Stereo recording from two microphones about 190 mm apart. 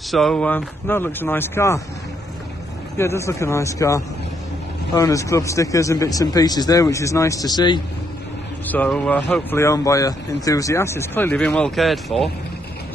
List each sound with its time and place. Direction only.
0.1 s speech: 5° left (ahead or behind)
3.0 s speech: 15° left (ahead or behind)
8.6 s speech: 10° left (ahead or behind)